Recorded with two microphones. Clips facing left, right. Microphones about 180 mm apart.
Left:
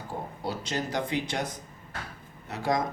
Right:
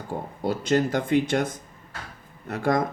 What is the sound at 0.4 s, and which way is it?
Speech, 55° right (ahead or behind).